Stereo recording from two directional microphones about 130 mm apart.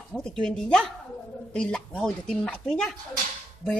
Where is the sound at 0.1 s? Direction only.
5° left (ahead or behind).